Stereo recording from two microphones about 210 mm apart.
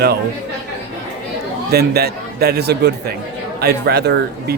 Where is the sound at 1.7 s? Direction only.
50° right (ahead or behind).